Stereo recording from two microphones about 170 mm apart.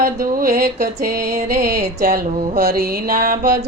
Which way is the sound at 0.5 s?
65° right (ahead or behind).